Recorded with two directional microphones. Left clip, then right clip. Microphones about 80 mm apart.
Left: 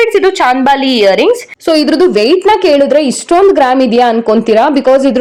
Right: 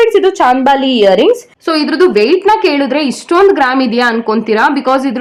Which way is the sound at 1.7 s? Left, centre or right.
Left.